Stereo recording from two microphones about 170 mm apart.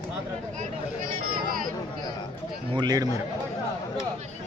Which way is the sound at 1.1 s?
55° right (ahead or behind).